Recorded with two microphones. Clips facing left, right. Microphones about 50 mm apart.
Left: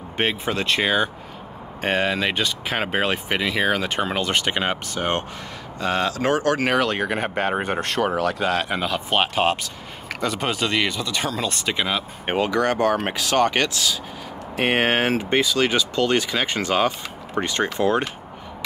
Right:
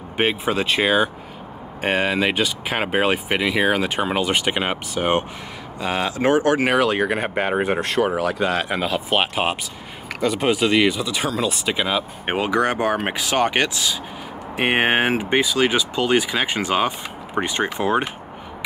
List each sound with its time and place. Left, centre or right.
0.2 s speech: centre
12.4 s speech: centre